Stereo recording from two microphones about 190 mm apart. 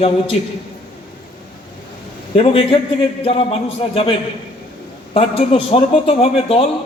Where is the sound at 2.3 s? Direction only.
30° left (ahead or behind).